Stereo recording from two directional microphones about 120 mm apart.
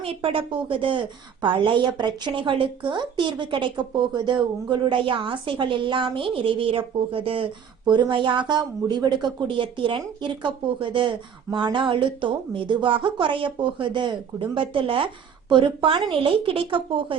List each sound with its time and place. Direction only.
0.0 s a woman's voice: 50° right (ahead or behind)